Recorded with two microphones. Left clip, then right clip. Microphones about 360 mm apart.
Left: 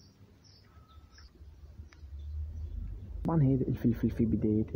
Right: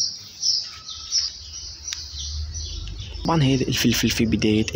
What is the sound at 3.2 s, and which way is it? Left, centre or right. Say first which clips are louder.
Speech: right 10 dB; left.